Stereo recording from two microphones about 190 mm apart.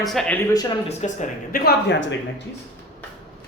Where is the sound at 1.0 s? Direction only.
45° left (ahead or behind).